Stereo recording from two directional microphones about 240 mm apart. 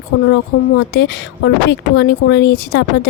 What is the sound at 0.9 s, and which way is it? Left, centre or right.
Speech, left.